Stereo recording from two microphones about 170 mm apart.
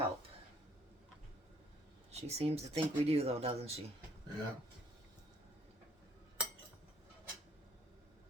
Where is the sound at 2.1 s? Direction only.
40° right (ahead or behind).